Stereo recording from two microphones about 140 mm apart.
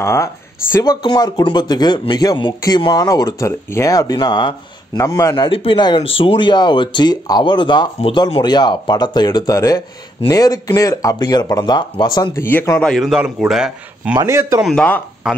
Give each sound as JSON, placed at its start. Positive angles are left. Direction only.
{"t": 0.0, "sound": "speech", "side_deg": 20}
{"t": 5.4, "sound": "speech", "side_deg": 40}
{"t": 12.4, "sound": "speech", "side_deg": 15}
{"t": 12.9, "sound": "a man's voice", "side_deg": -5}
{"t": 14.2, "sound": "speech", "side_deg": -20}
{"t": 14.6, "sound": "speech", "side_deg": 5}